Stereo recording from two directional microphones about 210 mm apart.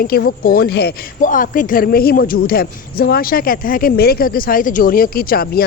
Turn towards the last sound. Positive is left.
turn(degrees=45)  # may be behind; listen again after turning